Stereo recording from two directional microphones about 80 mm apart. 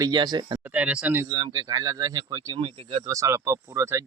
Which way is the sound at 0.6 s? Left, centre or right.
Centre.